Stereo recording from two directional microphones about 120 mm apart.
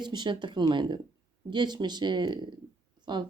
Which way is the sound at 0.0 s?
40° right (ahead or behind).